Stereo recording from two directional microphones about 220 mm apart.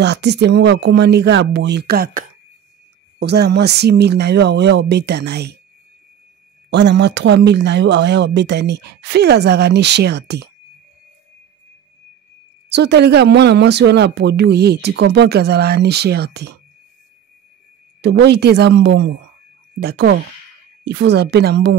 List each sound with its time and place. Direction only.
0.0 s speech: 50° right (ahead or behind)
6.7 s speech: 50° right (ahead or behind)
12.6 s speech: 50° right (ahead or behind)
18.0 s speech: 50° right (ahead or behind)